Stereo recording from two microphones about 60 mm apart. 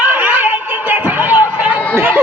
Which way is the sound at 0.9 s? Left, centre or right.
Right.